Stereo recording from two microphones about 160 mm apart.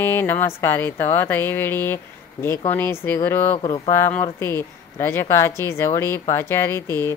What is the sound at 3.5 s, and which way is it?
Speech, 35° left (ahead or behind).